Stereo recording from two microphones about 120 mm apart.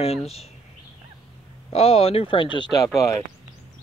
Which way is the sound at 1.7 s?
55° left (ahead or behind).